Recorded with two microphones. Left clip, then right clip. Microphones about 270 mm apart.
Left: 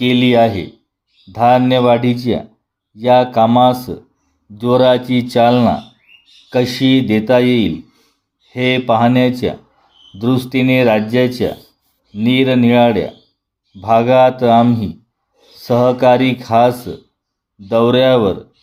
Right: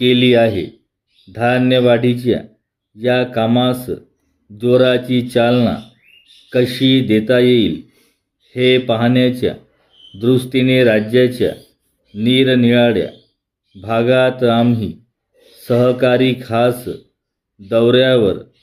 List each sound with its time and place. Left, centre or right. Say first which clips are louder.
0.0 s speech: even; centre